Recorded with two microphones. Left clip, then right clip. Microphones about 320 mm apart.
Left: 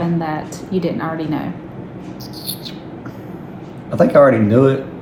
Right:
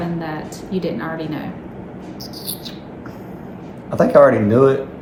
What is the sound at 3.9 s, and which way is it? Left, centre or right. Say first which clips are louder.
Speech: even; centre.